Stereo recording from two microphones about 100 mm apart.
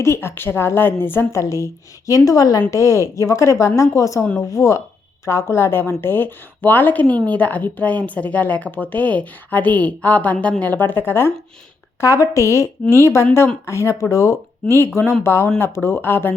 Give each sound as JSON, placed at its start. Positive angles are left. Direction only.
{"t": 0.0, "sound": "a woman's voice", "side_deg": 25}